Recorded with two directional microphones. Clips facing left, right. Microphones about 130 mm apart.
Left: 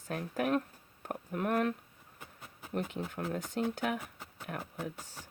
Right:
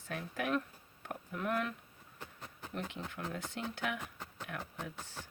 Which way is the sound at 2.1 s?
5° left (ahead or behind).